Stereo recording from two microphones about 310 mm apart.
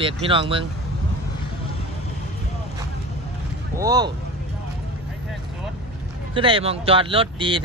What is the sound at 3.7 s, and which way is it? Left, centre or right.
Speech, centre.